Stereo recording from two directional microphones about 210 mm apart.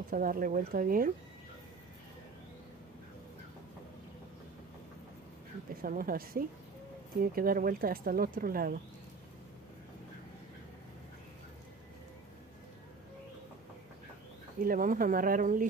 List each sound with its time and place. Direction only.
0.1 s speech: 40° right (ahead or behind)
5.8 s speech: 45° right (ahead or behind)
14.6 s speech: 40° right (ahead or behind)